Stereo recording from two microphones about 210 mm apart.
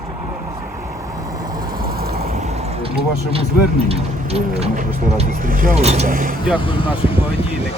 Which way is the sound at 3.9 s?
30° right (ahead or behind).